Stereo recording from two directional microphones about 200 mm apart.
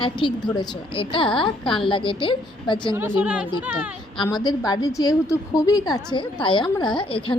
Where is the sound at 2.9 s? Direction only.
10° right (ahead or behind).